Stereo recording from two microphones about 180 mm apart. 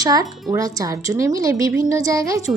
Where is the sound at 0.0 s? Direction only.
20° right (ahead or behind).